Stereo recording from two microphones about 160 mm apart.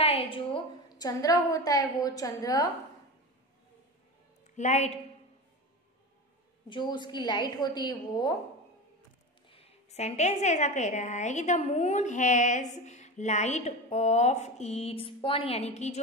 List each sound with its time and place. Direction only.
0.0 s a woman's voice: 35° left (ahead or behind)
4.6 s a woman's voice: 45° left (ahead or behind)
6.7 s a woman's voice: 30° left (ahead or behind)
9.5 s a woman's voice: 40° left (ahead or behind)